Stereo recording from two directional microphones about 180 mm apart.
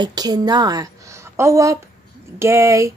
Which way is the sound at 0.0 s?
20° right (ahead or behind).